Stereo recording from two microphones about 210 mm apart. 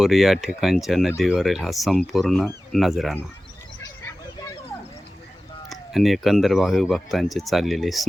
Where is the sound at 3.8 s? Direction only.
15° left (ahead or behind).